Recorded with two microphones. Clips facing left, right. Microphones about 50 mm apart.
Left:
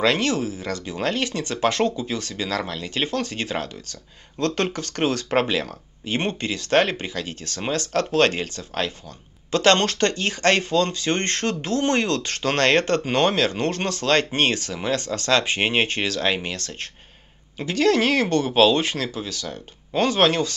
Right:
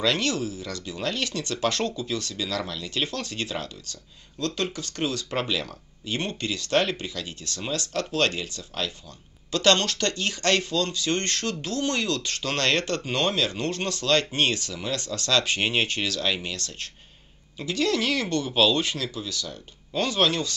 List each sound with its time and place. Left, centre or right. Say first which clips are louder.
0.0 s speech: left 4 dB; left